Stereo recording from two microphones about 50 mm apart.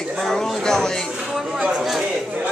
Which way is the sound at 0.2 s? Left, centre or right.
Centre.